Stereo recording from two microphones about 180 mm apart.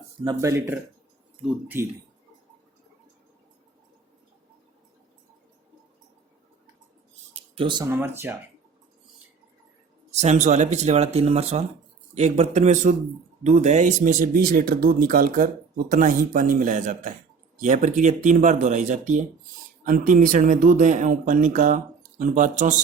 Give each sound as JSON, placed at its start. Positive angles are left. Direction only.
{"t": 0.3, "sound": "speech", "side_deg": -15}
{"t": 7.3, "sound": "a sound", "side_deg": -30}
{"t": 7.9, "sound": "speech", "side_deg": -10}
{"t": 10.1, "sound": "speech", "side_deg": -40}